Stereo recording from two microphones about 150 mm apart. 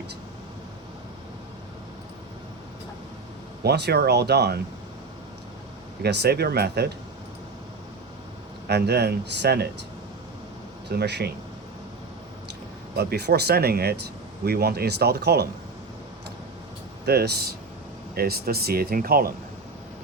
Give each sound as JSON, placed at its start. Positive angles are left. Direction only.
{"t": 3.6, "sound": "speech", "side_deg": -90}
{"t": 6.0, "sound": "speech", "side_deg": -90}
{"t": 8.6, "sound": "speech", "side_deg": -90}
{"t": 10.8, "sound": "speech", "side_deg": -90}
{"t": 13.0, "sound": "speech", "side_deg": -90}
{"t": 17.1, "sound": "speech", "side_deg": -90}